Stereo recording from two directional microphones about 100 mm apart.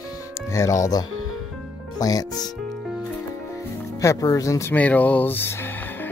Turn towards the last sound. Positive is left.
turn(degrees=20)  # may be behind; listen again after turning